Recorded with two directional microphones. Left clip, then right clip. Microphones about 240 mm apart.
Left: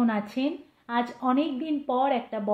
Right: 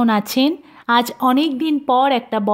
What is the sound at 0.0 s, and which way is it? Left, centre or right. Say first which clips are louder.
Speech: right 11 dB; right.